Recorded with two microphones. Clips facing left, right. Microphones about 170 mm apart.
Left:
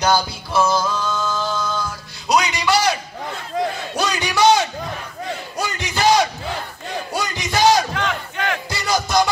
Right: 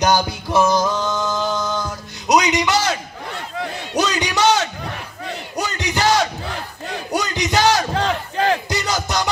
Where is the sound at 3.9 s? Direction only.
20° right (ahead or behind).